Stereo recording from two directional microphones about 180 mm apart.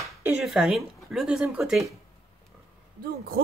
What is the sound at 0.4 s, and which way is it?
Speech, centre (ahead or behind).